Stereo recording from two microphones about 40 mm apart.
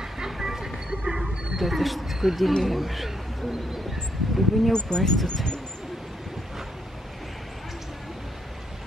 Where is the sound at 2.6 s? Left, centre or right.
Centre.